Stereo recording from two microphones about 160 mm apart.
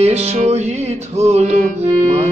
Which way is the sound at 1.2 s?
45° right (ahead or behind).